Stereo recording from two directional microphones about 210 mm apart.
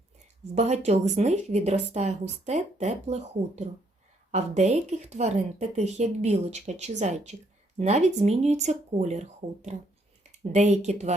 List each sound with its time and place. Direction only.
0.5 s speech: 30° right (ahead or behind)